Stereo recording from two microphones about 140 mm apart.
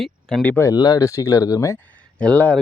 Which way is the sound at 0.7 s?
25° left (ahead or behind).